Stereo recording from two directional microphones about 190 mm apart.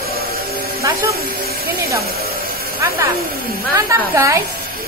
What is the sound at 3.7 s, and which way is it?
Speech, 15° right (ahead or behind).